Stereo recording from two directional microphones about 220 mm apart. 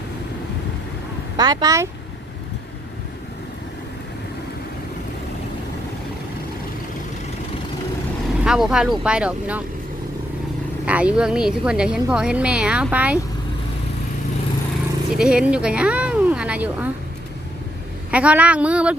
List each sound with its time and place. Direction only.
1.4 s speech: 20° right (ahead or behind)
8.4 s a woman's voice: centre (ahead or behind)
10.8 s a woman's voice: 5° right (ahead or behind)
15.1 s a woman's voice: 5° right (ahead or behind)
18.1 s a woman's voice: 5° right (ahead or behind)